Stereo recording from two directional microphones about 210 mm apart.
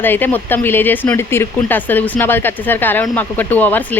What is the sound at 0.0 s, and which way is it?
Speech, 10° left (ahead or behind).